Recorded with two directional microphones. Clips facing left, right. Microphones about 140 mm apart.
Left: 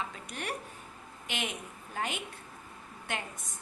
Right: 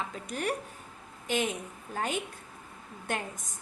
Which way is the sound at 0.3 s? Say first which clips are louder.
Right 7 dB; 40° right (ahead or behind).